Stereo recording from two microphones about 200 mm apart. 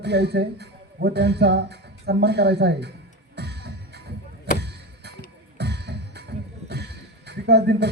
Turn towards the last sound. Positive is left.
turn(degrees=-55)  # may be behind; listen again after turning